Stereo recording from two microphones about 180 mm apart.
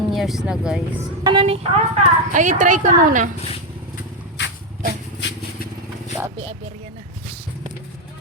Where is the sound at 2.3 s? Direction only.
45° right (ahead or behind).